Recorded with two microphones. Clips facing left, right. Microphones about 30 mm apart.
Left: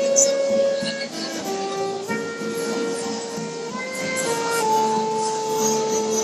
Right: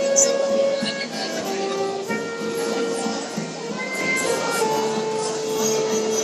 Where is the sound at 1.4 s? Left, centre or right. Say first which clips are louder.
Even; centre.